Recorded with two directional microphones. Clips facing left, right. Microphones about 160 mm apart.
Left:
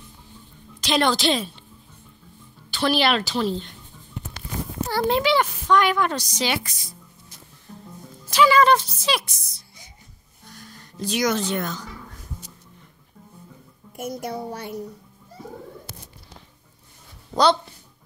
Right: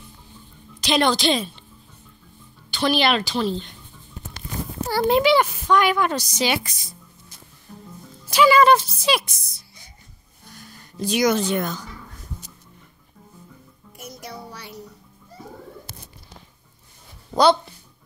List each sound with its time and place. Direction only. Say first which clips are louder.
0.7 s a woman's voice: right 1 dB; centre (ahead or behind)
2.7 s a woman's voice: right 1 dB; 5° left (ahead or behind)
4.9 s speech: right 3 dB; 10° right (ahead or behind)
8.3 s speech: right 2 dB; 10° right (ahead or behind)
10.5 s a sound: even; 5° right (ahead or behind)
13.9 s a child's voice: left 8 dB; 50° left (ahead or behind)
17.3 s a sound: right 2 dB; 10° right (ahead or behind)